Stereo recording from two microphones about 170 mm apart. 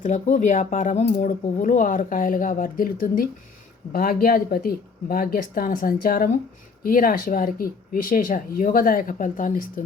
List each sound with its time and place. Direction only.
0.0 s speech: 50° left (ahead or behind)